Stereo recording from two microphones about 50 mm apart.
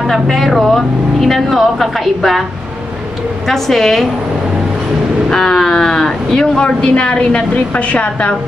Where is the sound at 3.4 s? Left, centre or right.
Centre.